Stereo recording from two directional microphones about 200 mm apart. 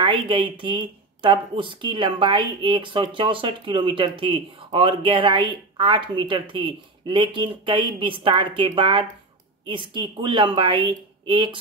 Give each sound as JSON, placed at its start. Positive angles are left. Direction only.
{"t": 0.0, "sound": "speech", "side_deg": -25}